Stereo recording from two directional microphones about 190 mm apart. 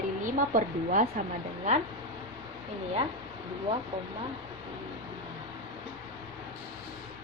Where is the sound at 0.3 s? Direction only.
45° right (ahead or behind).